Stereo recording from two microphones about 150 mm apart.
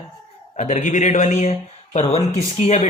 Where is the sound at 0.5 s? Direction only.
55° left (ahead or behind).